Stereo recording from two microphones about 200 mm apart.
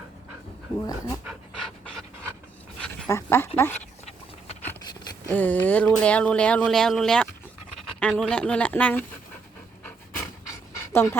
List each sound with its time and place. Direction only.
0.9 s speech: 15° left (ahead or behind)
1.2 s pant: 5° right (ahead or behind)
2.8 s speech: 10° left (ahead or behind)
5.3 s speech: 10° left (ahead or behind)
10.5 s pant: 15° left (ahead or behind)